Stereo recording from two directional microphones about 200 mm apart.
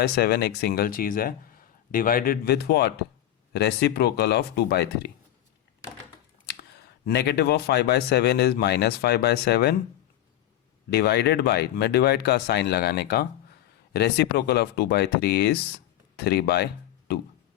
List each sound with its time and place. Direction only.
0.0 s speech: 50° left (ahead or behind)
6.5 s speech: 55° left (ahead or behind)
10.9 s speech: 55° left (ahead or behind)